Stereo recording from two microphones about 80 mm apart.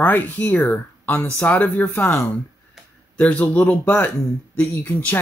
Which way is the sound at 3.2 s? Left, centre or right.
Centre.